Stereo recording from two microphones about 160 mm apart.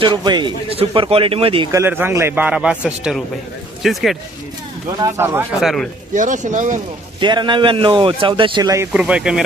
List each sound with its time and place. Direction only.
0.0 s a man's voice: 30° right (ahead or behind)
1.7 s a man's voice: 15° right (ahead or behind)
4.9 s a man's voice: 20° right (ahead or behind)
5.5 s speech: centre (ahead or behind)
6.1 s speech: 55° right (ahead or behind)
7.2 s a man's voice: 30° right (ahead or behind)
8.9 s speech: 5° right (ahead or behind)